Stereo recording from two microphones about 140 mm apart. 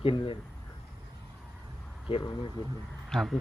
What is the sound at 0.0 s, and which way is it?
Speech, 40° left (ahead or behind).